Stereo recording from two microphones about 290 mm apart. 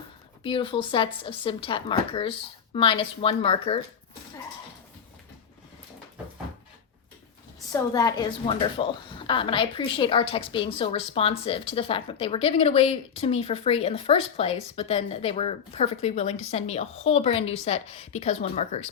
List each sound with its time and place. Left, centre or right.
0.4 s a woman's voice: centre
7.7 s a woman's voice: centre